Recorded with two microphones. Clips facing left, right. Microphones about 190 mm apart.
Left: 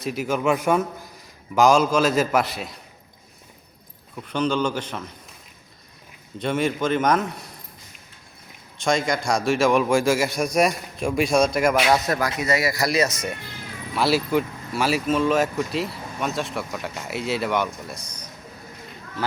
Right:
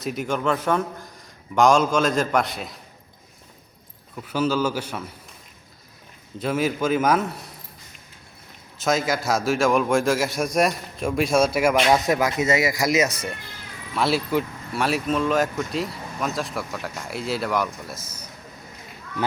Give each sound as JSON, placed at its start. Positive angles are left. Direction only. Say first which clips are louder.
{"t": 0.0, "sound": "a man's voice", "louder": "left 1 dB", "side_deg": 0}
{"t": 4.1, "sound": "speech", "louder": "even", "side_deg": -5}
{"t": 6.4, "sound": "speech", "louder": "even", "side_deg": -5}
{"t": 8.8, "sound": "speech", "louder": "even", "side_deg": -5}
{"t": 13.9, "sound": "speech", "louder": "left 1 dB", "side_deg": 0}